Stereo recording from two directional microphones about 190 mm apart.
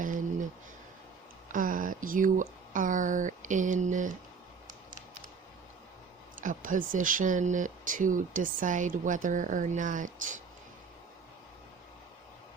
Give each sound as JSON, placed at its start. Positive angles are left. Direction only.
{"t": 0.0, "sound": "a sound", "side_deg": -45}
{"t": 1.5, "sound": "speech", "side_deg": -45}
{"t": 6.4, "sound": "speech", "side_deg": -45}